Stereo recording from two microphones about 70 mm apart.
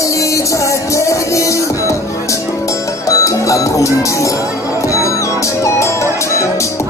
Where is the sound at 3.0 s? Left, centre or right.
Left.